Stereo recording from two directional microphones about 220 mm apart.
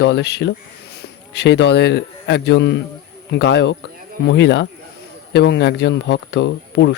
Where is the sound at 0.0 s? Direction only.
50° left (ahead or behind).